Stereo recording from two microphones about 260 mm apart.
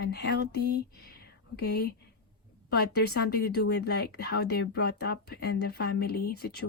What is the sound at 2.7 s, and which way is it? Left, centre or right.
Speech, left.